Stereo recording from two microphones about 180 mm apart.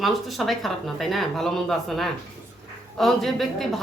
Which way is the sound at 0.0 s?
Centre (ahead or behind).